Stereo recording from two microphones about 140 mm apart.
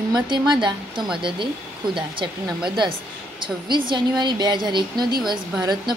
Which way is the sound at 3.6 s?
35° right (ahead or behind).